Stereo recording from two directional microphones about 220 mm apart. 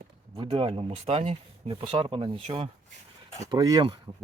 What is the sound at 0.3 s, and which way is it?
Speech, 25° right (ahead or behind).